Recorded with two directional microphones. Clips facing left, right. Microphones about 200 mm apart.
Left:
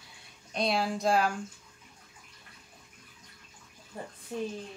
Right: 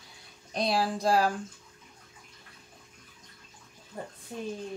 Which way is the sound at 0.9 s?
30° right (ahead or behind).